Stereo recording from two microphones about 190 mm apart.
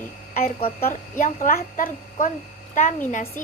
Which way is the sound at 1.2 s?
45° left (ahead or behind).